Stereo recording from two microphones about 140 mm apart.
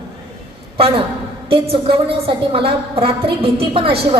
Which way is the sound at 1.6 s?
40° right (ahead or behind).